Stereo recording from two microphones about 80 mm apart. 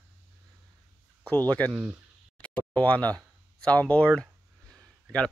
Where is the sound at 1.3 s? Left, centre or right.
Centre.